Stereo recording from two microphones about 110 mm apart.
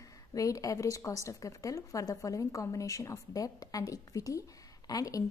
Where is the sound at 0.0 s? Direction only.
30° left (ahead or behind).